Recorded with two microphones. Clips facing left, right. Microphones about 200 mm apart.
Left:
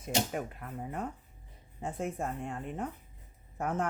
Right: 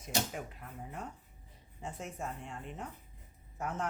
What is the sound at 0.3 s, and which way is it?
Speech, 55° left (ahead or behind).